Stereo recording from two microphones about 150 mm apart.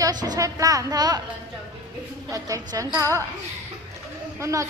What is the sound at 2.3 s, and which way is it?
Speech, 20° right (ahead or behind).